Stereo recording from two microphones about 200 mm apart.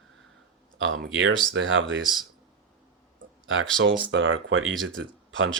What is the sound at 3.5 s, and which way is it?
Speech, 70° right (ahead or behind).